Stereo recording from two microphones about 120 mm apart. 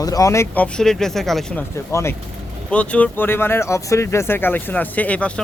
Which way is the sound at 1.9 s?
20° left (ahead or behind).